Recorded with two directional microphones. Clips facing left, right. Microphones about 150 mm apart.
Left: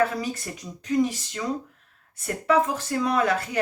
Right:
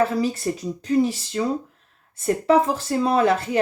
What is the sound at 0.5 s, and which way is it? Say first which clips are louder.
Speech: right 6 dB; 35° right (ahead or behind).